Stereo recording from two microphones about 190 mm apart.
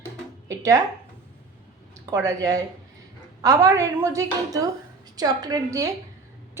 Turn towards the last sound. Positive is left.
turn(degrees=-20)  # may be behind; listen again after turning